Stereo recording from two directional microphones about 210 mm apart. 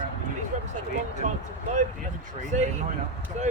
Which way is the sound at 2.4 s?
35° right (ahead or behind).